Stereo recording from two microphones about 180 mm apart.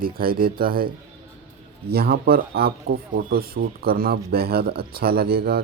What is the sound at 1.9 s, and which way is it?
Speech, 60° right (ahead or behind).